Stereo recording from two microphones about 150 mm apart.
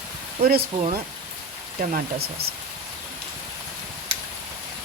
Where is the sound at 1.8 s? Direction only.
75° right (ahead or behind).